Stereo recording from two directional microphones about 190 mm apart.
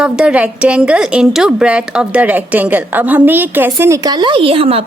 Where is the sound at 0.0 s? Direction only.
5° right (ahead or behind).